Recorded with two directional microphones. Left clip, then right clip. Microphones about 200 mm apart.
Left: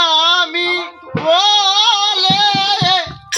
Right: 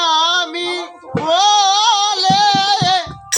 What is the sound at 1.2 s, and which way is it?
Child singing, 20° right (ahead or behind).